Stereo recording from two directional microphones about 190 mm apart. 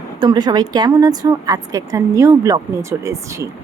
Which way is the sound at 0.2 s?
20° right (ahead or behind).